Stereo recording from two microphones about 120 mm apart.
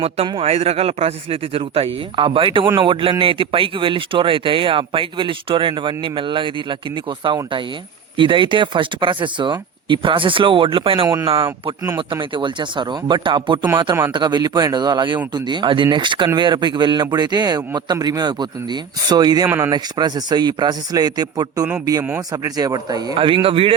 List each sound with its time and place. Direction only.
0.3 s a man's voice: 50° right (ahead or behind); by 19.5 s 35° right (ahead or behind)
19.5 s speech: 20° right (ahead or behind)
19.7 s speech: 35° right (ahead or behind)
23.1 s a man's voice: 45° right (ahead or behind)